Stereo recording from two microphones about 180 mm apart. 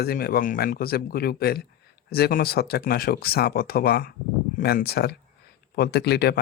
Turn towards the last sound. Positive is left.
turn(degrees=65)  # may be behind; listen again after turning